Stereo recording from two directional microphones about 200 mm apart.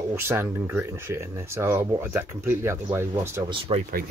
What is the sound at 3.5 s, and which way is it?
Speech, 25° right (ahead or behind).